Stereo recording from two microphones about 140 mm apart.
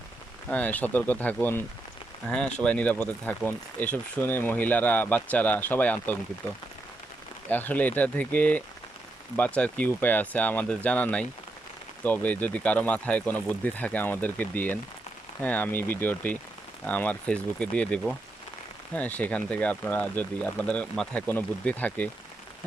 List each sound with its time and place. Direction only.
0.5 s speech: 10° left (ahead or behind)